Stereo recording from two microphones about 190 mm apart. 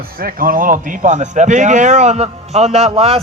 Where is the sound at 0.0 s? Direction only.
50° right (ahead or behind).